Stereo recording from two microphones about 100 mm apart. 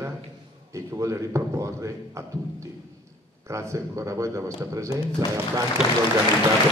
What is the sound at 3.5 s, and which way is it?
A man's voice, 30° right (ahead or behind).